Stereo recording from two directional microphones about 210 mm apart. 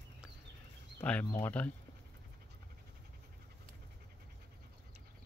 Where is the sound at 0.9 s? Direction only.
5° left (ahead or behind).